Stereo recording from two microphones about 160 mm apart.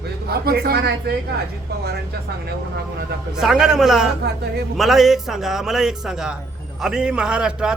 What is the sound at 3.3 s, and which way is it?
Speech, 5° right (ahead or behind).